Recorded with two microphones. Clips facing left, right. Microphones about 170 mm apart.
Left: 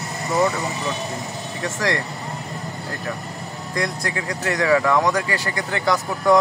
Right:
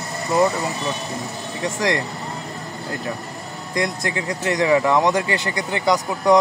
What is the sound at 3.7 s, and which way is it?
Speech, 20° right (ahead or behind).